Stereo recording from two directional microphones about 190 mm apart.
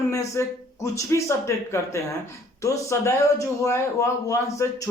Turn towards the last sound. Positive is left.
turn(degrees=15)  # may be behind; listen again after turning